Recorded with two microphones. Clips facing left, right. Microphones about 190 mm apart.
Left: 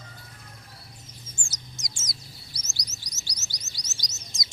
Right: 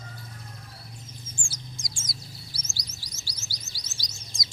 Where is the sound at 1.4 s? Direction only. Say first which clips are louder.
Right 3 dB; 20° left (ahead or behind).